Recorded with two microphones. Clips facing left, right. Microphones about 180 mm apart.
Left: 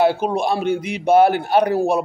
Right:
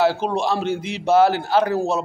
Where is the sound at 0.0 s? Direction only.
10° left (ahead or behind).